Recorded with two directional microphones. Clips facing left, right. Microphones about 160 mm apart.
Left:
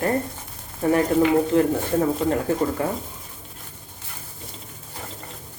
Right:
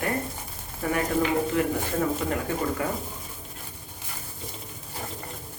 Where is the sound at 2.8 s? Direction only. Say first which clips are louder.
Left 4 dB; 30° left (ahead or behind).